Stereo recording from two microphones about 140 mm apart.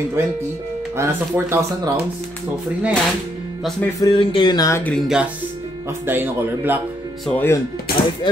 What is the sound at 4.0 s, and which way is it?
Speech, 35° left (ahead or behind).